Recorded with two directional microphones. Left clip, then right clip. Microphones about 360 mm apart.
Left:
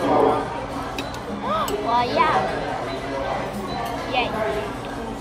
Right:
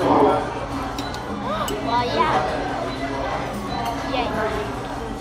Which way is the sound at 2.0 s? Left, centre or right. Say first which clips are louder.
Left 1 dB; centre.